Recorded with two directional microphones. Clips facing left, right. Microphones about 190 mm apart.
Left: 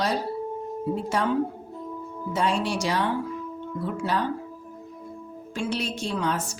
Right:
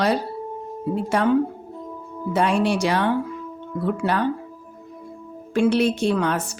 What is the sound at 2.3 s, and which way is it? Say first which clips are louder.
Speech: right 5 dB; 60° right (ahead or behind).